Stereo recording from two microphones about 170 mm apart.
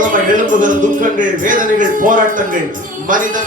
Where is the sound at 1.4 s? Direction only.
50° right (ahead or behind).